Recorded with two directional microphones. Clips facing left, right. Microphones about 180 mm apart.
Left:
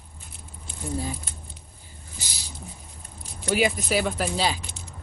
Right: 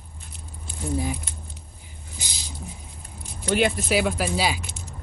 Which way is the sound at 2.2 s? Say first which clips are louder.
Right 1 dB; 15° right (ahead or behind).